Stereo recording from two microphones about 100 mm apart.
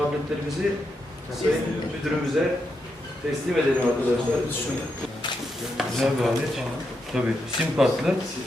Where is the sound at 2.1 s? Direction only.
Centre (ahead or behind).